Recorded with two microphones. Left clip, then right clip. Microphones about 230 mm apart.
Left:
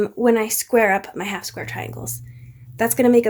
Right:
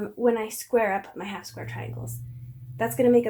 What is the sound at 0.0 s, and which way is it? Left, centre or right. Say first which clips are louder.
Speech: left 7 dB; left.